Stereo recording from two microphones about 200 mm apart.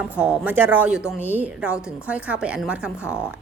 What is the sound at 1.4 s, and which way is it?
A woman's voice, 5° right (ahead or behind).